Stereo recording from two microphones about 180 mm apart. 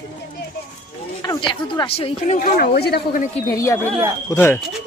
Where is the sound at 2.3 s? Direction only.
50° left (ahead or behind).